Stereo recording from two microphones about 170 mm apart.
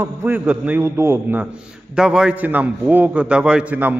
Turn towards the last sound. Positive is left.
turn(degrees=-10)  # may be behind; listen again after turning